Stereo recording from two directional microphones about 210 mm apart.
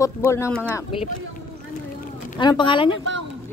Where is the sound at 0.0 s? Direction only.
15° left (ahead or behind).